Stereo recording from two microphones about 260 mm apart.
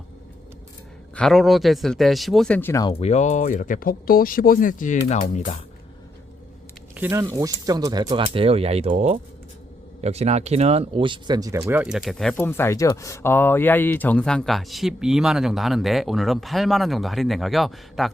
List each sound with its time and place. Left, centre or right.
1.1 s speech: centre; by 5.5 s left
6.9 s speech: centre